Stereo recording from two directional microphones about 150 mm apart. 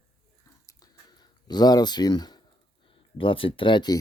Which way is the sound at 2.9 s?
35° left (ahead or behind).